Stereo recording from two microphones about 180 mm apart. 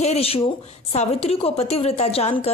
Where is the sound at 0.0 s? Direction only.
35° left (ahead or behind).